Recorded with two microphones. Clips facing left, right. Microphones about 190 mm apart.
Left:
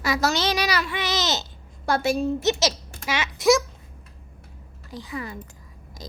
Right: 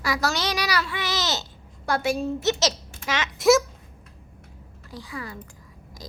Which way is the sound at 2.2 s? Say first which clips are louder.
Left 2 dB; 15° left (ahead or behind).